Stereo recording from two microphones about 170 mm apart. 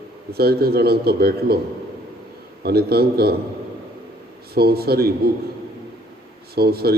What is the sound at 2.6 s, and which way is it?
Speech, 65° right (ahead or behind).